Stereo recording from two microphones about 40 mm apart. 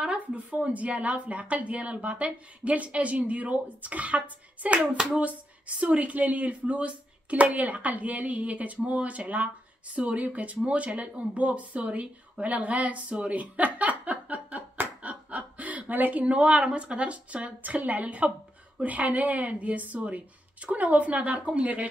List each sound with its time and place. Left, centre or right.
0.0 s a sound: right
0.5 s a woman's voice: right
4.7 s speech: centre
5.8 s a woman's voice: right
13.3 s a sound: right
15.0 s chuckle: right
16.6 s a woman's voice: right